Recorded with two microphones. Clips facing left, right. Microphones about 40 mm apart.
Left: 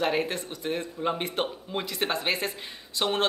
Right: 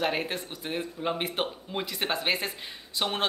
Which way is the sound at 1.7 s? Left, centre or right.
Centre.